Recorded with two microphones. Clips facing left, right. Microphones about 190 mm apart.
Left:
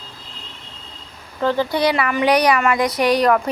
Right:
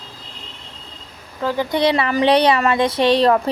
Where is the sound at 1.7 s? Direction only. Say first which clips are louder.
Right 1 dB; 25° right (ahead or behind).